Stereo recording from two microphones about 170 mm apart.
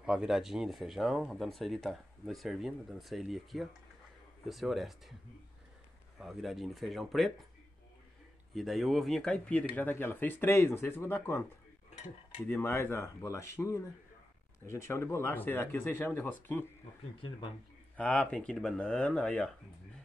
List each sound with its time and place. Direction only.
0.0 s speech: 5° right (ahead or behind)
6.1 s speech: centre (ahead or behind)
8.5 s speech: centre (ahead or behind)
12.4 s speech: 15° left (ahead or behind)
17.9 s speech: 5° left (ahead or behind)